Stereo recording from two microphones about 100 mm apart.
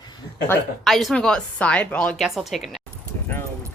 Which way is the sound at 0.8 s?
Centre (ahead or behind).